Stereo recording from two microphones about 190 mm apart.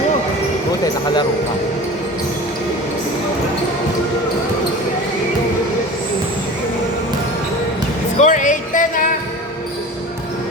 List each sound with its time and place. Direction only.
8.2 s music: 40° left (ahead or behind)